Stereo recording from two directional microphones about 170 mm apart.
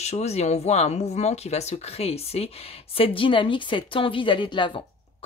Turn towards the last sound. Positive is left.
turn(degrees=30)  # may be behind; listen again after turning